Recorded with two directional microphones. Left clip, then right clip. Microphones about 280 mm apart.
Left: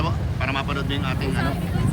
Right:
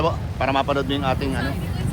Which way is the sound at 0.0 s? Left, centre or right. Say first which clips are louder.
Right 5 dB; centre.